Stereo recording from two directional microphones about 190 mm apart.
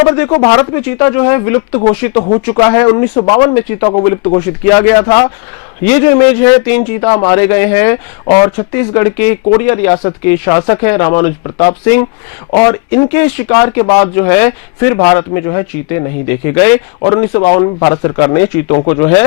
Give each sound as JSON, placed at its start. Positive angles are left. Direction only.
{"t": 0.3, "sound": "speech", "side_deg": 25}
{"t": 1.7, "sound": "speech", "side_deg": 35}
{"t": 2.5, "sound": "a man's voice", "side_deg": 20}
{"t": 10.6, "sound": "a man's voice", "side_deg": 30}
{"t": 10.8, "sound": "a man's voice", "side_deg": 15}